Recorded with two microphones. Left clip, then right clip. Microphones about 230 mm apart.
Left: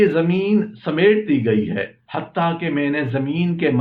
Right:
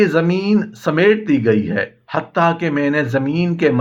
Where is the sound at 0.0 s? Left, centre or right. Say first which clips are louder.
Right 1 dB; right.